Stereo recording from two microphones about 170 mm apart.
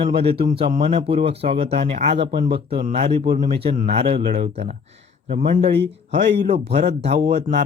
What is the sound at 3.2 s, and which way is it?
Speech, 55° right (ahead or behind).